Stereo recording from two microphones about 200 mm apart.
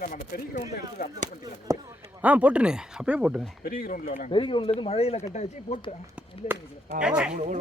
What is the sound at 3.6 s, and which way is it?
Speech, 45° left (ahead or behind).